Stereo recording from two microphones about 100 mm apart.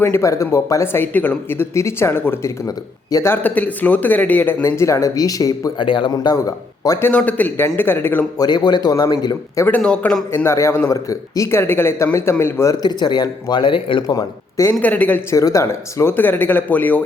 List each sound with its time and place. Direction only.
0.0 s speech: 25° left (ahead or behind)
2.6 s speech: 35° left (ahead or behind)
3.2 s a man's voice: 20° left (ahead or behind)
4.6 s speech: 30° left (ahead or behind)
5.8 s speech: 55° left (ahead or behind)
7.0 s speech: 15° left (ahead or behind)
8.4 s speech: 45° left (ahead or behind)
9.6 s a man's voice: 15° left (ahead or behind)
10.3 s speech: 25° left (ahead or behind)
12.8 s speech: 45° left (ahead or behind)
14.1 s speech: 35° left (ahead or behind)
14.8 s a man's voice: 15° left (ahead or behind)
15.3 s speech: 35° left (ahead or behind); by 17.0 s 15° left (ahead or behind)